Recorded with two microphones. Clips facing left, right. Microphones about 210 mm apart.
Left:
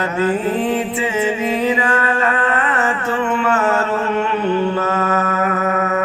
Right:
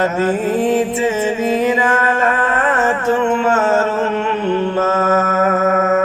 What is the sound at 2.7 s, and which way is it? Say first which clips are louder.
Music: right 4 dB; 45° right (ahead or behind).